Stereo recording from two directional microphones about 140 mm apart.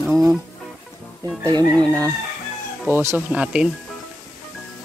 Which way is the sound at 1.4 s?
30° right (ahead or behind).